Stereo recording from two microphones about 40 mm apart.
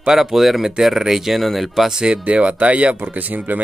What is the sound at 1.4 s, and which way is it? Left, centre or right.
Speech, centre.